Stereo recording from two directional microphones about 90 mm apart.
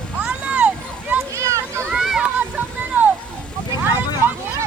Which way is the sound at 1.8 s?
10° right (ahead or behind).